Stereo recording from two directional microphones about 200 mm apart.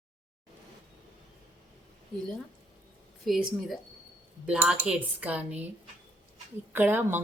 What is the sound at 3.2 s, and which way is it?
A woman's voice, centre (ahead or behind).